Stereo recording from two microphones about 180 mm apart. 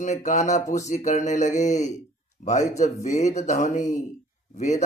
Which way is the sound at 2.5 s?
20° left (ahead or behind).